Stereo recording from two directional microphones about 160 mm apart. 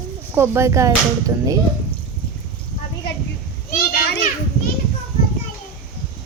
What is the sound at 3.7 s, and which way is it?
Children playing, 75° left (ahead or behind).